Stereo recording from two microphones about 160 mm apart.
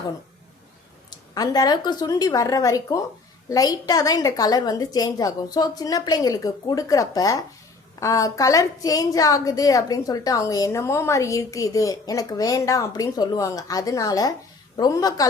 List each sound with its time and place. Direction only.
1.3 s a woman's voice: 25° left (ahead or behind)